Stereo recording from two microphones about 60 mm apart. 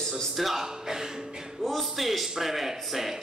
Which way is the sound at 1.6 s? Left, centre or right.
Centre.